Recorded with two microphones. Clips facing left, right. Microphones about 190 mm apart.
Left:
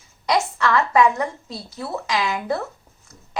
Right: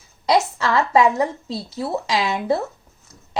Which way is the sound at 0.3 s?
30° right (ahead or behind).